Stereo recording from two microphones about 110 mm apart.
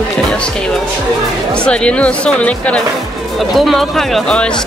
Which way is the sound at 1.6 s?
10° left (ahead or behind).